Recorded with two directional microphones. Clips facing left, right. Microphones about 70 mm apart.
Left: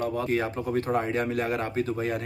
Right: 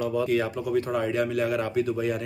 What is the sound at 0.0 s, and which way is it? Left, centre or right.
A man's voice, left.